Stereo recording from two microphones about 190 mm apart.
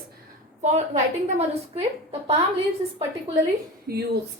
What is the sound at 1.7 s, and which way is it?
Speech, 30° right (ahead or behind).